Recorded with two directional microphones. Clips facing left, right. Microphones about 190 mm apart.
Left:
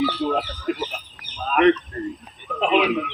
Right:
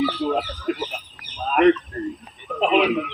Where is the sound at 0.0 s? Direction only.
Centre (ahead or behind).